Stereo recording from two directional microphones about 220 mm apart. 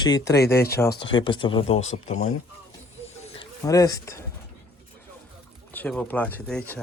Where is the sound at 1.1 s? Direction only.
20° left (ahead or behind).